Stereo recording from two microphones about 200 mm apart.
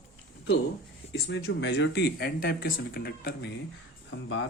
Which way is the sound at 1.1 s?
55° left (ahead or behind).